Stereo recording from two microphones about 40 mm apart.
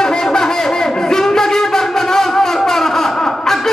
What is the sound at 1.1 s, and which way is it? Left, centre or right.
Shofar, centre.